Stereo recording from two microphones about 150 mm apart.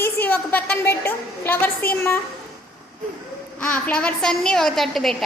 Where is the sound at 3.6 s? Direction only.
10° left (ahead or behind).